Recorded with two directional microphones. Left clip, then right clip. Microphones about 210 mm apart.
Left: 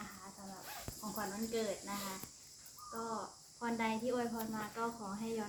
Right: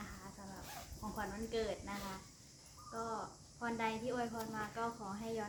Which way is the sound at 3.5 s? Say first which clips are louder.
Left 1 dB; centre (ahead or behind).